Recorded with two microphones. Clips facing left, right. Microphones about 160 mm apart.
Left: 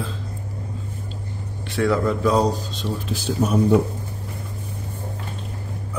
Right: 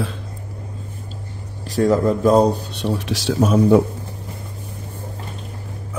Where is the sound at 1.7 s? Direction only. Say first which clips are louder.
Right 4 dB; 40° right (ahead or behind); by 3.7 s 90° right.